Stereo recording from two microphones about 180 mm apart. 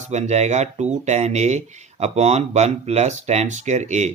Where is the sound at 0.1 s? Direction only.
40° right (ahead or behind).